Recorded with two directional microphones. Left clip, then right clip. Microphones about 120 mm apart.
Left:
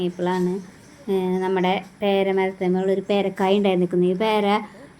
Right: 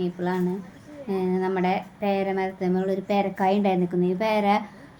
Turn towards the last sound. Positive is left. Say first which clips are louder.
# left 2 dB
turn(degrees=20)  # may be behind; listen again after turning